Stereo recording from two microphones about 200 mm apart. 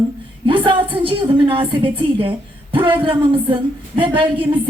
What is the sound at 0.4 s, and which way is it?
A woman's voice, 25° right (ahead or behind).